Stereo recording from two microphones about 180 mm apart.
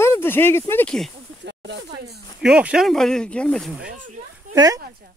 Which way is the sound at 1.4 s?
75° right (ahead or behind).